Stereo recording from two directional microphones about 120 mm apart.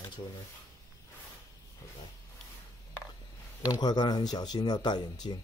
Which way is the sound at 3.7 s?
35° left (ahead or behind).